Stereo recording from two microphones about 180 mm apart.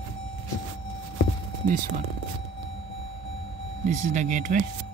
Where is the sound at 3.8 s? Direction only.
40° right (ahead or behind).